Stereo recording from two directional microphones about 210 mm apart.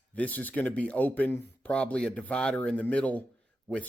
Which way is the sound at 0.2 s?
10° left (ahead or behind).